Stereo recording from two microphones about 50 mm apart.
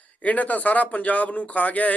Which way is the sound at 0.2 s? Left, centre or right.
Left.